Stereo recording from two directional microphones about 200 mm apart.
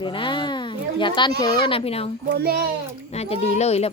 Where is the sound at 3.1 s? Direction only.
30° left (ahead or behind).